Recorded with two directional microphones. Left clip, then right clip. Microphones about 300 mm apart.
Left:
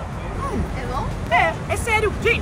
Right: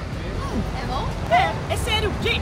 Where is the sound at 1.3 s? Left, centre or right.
Centre.